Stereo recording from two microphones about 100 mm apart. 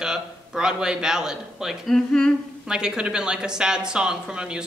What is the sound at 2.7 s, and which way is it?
A man's voice, 10° right (ahead or behind).